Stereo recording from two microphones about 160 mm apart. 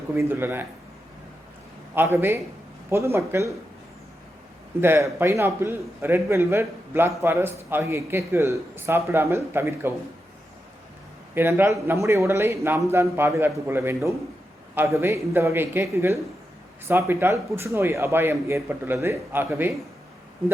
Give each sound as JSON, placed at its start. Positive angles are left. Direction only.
{"t": 0.2, "sound": "a man's voice", "side_deg": -15}
{"t": 2.0, "sound": "a man's voice", "side_deg": -15}
{"t": 4.8, "sound": "a man's voice", "side_deg": -15}
{"t": 11.3, "sound": "a man's voice", "side_deg": -15}